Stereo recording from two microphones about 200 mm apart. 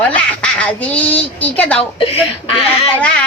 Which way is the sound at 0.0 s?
5° left (ahead or behind).